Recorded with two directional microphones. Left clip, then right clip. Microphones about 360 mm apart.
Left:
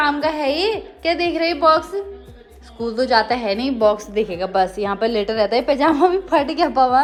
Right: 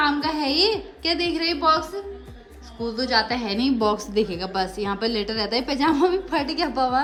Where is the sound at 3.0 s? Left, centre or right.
Centre.